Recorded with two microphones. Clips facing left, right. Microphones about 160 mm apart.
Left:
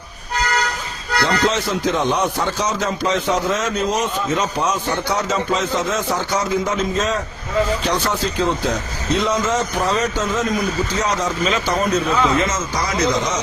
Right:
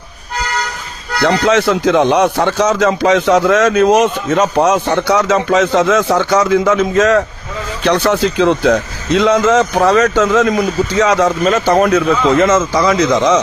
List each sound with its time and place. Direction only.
1.2 s a man's voice: 70° right (ahead or behind); by 13.4 s 90° right